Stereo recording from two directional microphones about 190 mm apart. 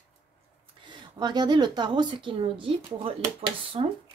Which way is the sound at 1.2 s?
20° right (ahead or behind).